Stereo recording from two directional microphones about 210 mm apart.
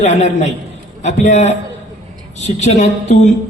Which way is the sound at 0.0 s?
35° left (ahead or behind).